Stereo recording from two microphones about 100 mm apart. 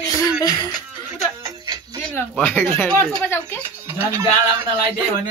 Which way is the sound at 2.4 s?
20° left (ahead or behind).